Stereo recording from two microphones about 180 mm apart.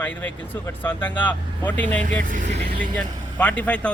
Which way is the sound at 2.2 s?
45° right (ahead or behind).